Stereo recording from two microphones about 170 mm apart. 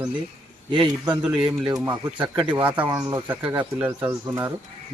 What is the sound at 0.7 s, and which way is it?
Speech, 30° right (ahead or behind).